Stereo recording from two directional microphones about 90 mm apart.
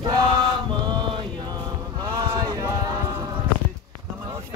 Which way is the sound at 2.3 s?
50° right (ahead or behind).